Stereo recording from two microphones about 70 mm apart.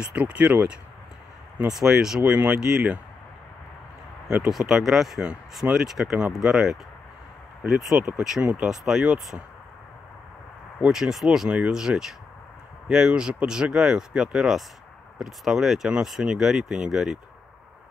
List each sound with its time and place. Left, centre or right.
0.1 s speech: centre
1.7 s speech: centre
4.3 s speech: centre
7.9 s speech: right
8.6 s speech: centre
10.9 s speech: centre